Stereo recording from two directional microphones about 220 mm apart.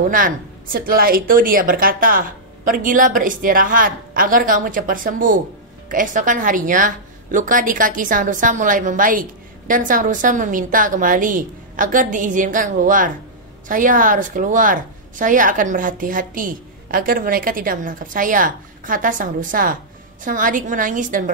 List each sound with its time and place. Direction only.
0.1 s a woman's voice: 40° right (ahead or behind)